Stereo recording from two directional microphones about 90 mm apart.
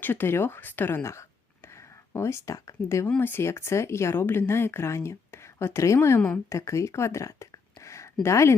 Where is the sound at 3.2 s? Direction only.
25° left (ahead or behind).